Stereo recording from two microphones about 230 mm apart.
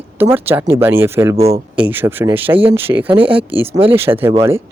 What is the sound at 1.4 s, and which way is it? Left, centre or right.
Speech, right.